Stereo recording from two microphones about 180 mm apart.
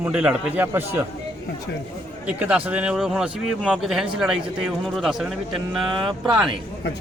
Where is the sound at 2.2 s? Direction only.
10° right (ahead or behind).